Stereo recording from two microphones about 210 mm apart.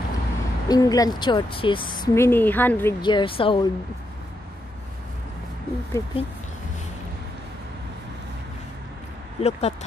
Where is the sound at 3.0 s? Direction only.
25° left (ahead or behind).